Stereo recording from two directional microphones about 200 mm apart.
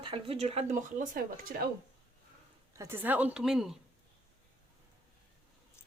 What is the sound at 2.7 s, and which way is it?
A woman's voice, 15° right (ahead or behind).